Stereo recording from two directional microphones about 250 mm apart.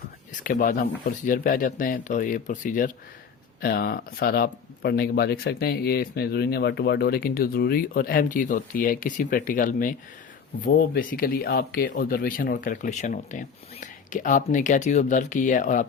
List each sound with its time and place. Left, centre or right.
0.3 s speech: left